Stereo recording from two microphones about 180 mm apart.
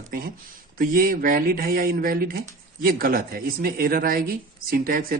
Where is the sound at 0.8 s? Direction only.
55° right (ahead or behind).